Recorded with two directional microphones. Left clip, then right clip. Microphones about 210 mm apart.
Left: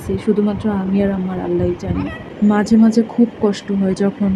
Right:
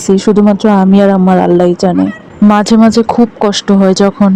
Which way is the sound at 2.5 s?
35° right (ahead or behind).